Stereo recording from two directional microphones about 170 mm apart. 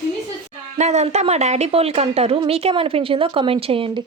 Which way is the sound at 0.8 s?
40° right (ahead or behind).